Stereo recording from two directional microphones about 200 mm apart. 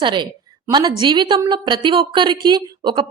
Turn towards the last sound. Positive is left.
turn(degrees=-20)  # may be behind; listen again after turning